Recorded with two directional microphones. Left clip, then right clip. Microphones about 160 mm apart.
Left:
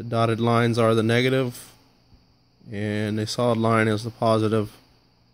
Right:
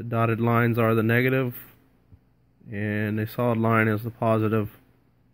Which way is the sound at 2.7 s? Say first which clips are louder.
Left 1 dB; 20° left (ahead or behind).